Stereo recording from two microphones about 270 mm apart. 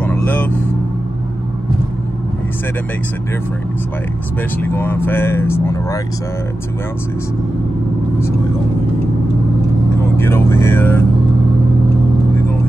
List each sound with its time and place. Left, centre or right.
0.0 s vehicle: centre
4.6 s speech: centre
10.1 s speech: centre